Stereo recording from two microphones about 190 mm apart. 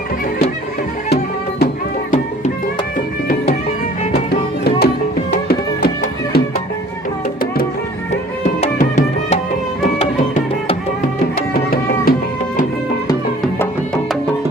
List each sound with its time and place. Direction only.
1.1 s music: 55° left (ahead or behind)
4.3 s music: 55° left (ahead or behind)
8.6 s music: 35° left (ahead or behind)
11.5 s music: 50° left (ahead or behind)
13.6 s music: 5° left (ahead or behind)